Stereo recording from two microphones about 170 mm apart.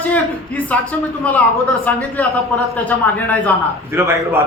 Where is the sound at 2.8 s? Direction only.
10° left (ahead or behind).